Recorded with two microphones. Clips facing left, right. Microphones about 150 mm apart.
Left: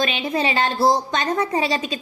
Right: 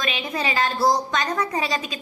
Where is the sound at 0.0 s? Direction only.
30° left (ahead or behind).